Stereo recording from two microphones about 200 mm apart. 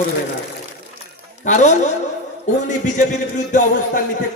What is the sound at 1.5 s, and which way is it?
A man's voice, 40° left (ahead or behind).